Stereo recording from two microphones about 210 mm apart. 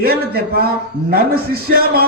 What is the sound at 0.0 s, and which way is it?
Speech, 45° right (ahead or behind).